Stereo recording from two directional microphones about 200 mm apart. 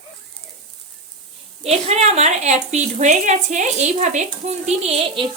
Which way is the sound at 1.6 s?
30° right (ahead or behind).